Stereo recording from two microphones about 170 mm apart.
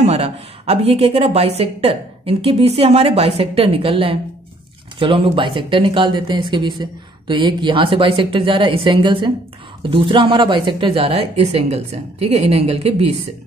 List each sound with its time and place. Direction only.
0.0 s a woman's voice: 40° right (ahead or behind)